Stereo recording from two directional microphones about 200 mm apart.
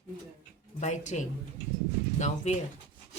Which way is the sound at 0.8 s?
35° left (ahead or behind).